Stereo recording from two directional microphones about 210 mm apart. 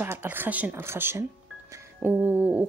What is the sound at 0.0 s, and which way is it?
Speech, 10° right (ahead or behind).